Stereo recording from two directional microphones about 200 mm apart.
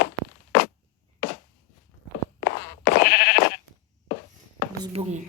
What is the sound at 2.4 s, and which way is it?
Sheep, 60° left (ahead or behind).